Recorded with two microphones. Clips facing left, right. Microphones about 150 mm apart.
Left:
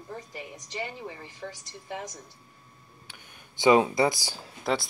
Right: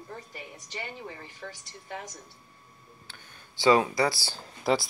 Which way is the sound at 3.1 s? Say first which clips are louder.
Even; 15° left (ahead or behind).